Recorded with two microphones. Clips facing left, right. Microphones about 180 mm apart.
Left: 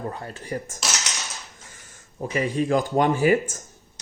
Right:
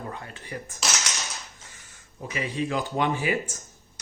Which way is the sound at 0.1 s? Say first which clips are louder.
Left 6 dB; 35° left (ahead or behind).